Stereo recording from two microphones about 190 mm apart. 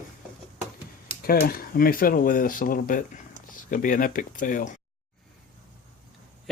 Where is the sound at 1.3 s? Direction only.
50° left (ahead or behind).